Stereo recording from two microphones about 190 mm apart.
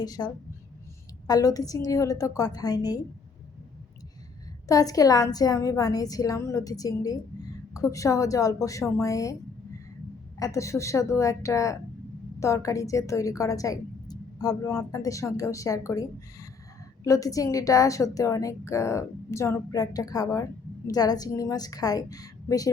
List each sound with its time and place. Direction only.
0.0 s a woman's voice: 20° left (ahead or behind)
1.3 s a woman's voice: 20° left (ahead or behind)
4.7 s a woman's voice: 20° left (ahead or behind)
10.4 s a woman's voice: 15° left (ahead or behind)